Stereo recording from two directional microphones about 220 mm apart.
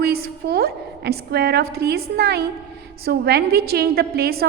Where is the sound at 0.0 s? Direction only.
45° right (ahead or behind).